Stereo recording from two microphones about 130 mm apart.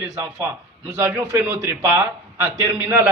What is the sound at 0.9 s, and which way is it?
A man's voice, 20° right (ahead or behind).